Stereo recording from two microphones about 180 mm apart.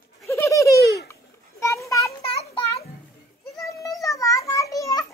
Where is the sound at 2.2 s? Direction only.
30° left (ahead or behind).